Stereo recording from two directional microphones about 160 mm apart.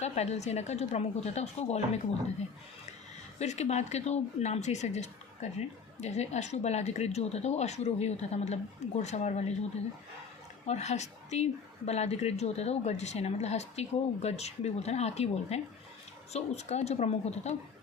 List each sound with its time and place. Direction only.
0.0 s speech: 45° left (ahead or behind)
3.3 s speech: 45° left (ahead or behind)
10.7 s speech: 45° left (ahead or behind)